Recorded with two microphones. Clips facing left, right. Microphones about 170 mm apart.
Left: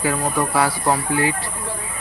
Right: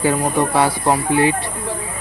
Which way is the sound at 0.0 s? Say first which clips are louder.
Right 4 dB; 25° right (ahead or behind).